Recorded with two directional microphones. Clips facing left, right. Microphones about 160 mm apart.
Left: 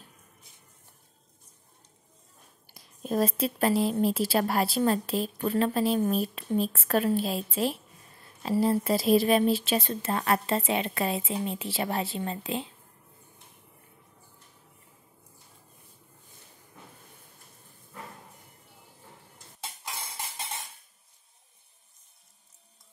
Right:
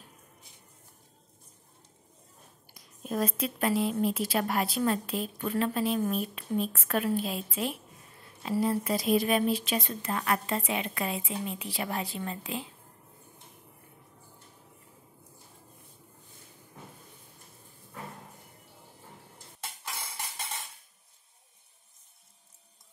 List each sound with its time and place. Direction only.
2.7 s a woman's voice: 30° left (ahead or behind)
19.8 s music: 20° left (ahead or behind)